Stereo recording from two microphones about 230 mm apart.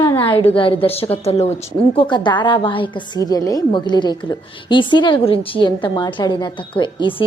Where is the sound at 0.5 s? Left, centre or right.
Left.